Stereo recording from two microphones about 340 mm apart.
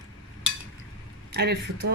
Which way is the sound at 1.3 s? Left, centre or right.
Right.